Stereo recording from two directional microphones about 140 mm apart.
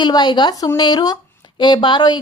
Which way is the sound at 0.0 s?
30° left (ahead or behind).